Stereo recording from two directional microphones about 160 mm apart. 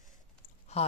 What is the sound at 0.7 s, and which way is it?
Speech, 40° left (ahead or behind).